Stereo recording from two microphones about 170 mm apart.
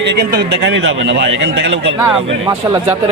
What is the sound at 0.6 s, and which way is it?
A man's voice, 90° right.